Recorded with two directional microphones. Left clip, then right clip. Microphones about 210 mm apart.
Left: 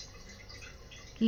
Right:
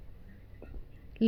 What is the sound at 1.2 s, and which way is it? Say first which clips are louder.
Speech: right 2 dB; 5° right (ahead or behind).